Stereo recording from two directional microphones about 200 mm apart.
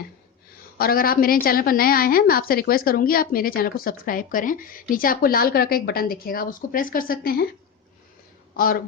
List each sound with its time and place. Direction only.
0.8 s a woman's voice: 50° left (ahead or behind)
8.5 s speech: 45° left (ahead or behind)